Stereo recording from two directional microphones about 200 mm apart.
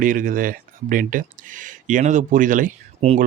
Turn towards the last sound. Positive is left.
turn(degrees=-35)  # may be behind; listen again after turning